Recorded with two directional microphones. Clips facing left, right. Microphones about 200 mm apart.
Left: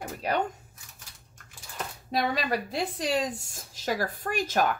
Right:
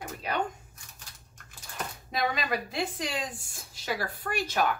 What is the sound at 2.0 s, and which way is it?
A woman's voice, 35° left (ahead or behind).